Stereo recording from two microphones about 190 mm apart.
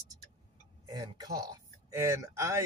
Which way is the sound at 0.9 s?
20° right (ahead or behind).